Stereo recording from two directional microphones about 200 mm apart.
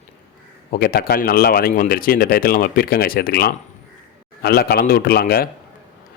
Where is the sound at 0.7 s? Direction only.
45° left (ahead or behind).